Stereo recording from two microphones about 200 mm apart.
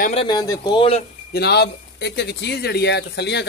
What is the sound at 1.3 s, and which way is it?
Speech, 55° left (ahead or behind).